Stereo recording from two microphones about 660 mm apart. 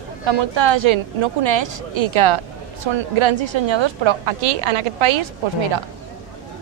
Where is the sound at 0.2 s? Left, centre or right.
Right.